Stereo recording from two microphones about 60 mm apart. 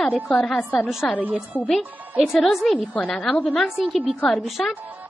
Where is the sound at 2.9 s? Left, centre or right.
Centre.